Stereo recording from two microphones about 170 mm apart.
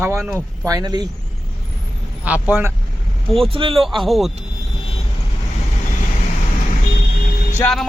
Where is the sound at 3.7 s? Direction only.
Centre (ahead or behind).